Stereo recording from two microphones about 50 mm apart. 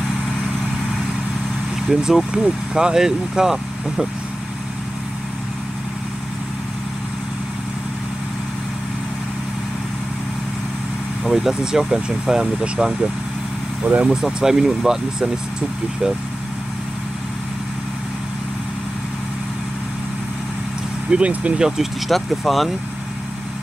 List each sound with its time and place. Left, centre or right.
1.9 s speech: centre
11.2 s speech: centre; by 14.1 s right
14.2 s speech: centre
21.1 s speech: right
21.5 s speech: centre